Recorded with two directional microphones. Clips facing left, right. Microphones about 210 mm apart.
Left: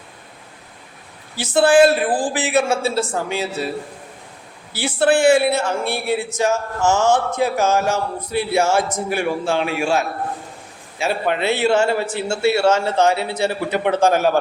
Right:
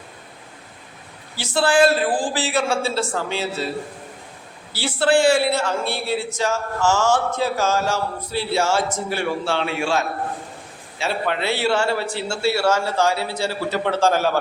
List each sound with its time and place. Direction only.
1.4 s a man's voice: 20° left (ahead or behind)
4.8 s a man's voice: 20° left (ahead or behind)
11.0 s a man's voice: 20° left (ahead or behind)